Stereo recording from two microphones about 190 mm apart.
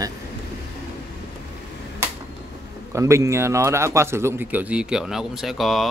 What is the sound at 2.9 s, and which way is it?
Speech, 15° right (ahead or behind).